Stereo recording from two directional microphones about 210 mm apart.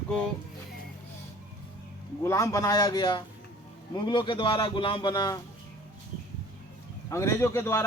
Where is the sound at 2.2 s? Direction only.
15° left (ahead or behind).